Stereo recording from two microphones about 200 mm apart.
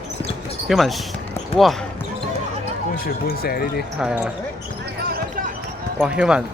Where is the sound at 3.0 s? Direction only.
50° left (ahead or behind).